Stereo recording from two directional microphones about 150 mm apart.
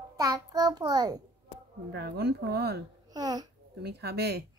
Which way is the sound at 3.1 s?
25° right (ahead or behind).